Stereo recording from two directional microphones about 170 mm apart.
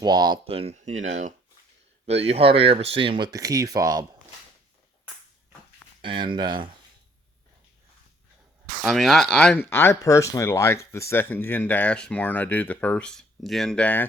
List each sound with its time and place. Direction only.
0.0 s speech: 25° right (ahead or behind)
6.0 s speech: 30° right (ahead or behind)
8.8 s speech: centre (ahead or behind)